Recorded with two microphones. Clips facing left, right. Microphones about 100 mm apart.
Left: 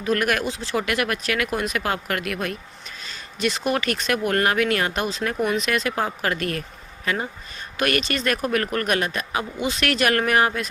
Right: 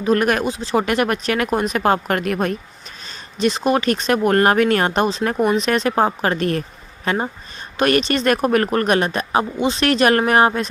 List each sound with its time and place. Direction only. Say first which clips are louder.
0.0 s speech: right 5 dB; 30° right (ahead or behind)
0.4 s speech: right 6 dB; 20° right (ahead or behind)
0.8 s speech: right 6 dB; 30° right (ahead or behind)
3.4 s speech: right 6 dB; 25° right (ahead or behind)